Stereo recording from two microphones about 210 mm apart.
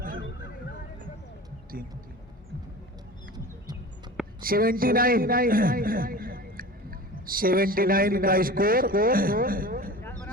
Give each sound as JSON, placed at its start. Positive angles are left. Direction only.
{"t": 3.3, "sound": "music", "side_deg": -20}
{"t": 4.4, "sound": "a man's voice", "side_deg": -45}